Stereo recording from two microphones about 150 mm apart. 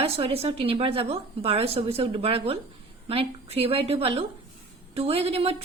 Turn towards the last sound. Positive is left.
turn(degrees=-40)  # may be behind; listen again after turning